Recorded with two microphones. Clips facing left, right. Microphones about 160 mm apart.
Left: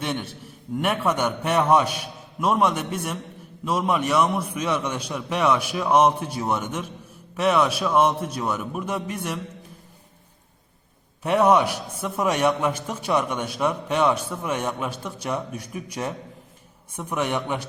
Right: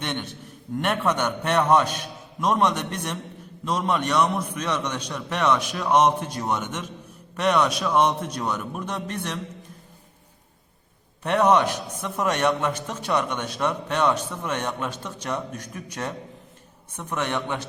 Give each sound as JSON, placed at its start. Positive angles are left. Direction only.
{"t": 0.0, "sound": "a man's voice", "side_deg": 5}
{"t": 11.2, "sound": "a man's voice", "side_deg": 10}